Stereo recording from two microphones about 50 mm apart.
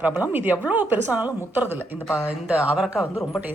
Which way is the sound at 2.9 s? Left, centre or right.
Centre.